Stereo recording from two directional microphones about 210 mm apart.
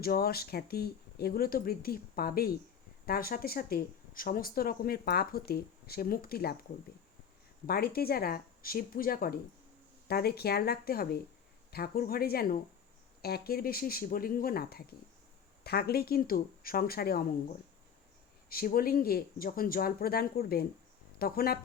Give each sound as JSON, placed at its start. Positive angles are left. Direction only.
{"t": 0.0, "sound": "speech", "side_deg": 45}
{"t": 7.7, "sound": "speech", "side_deg": 45}
{"t": 18.4, "sound": "speech", "side_deg": 45}